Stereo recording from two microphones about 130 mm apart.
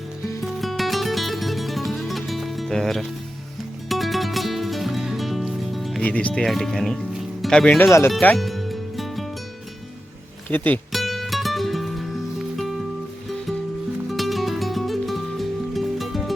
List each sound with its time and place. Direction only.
0.4 s music: centre (ahead or behind)
6.1 s speech: 10° left (ahead or behind)
7.9 s speech: 20° left (ahead or behind)
8.4 s music: centre (ahead or behind)
10.5 s speech: 15° left (ahead or behind)
10.9 s music: centre (ahead or behind)
14.1 s music: centre (ahead or behind)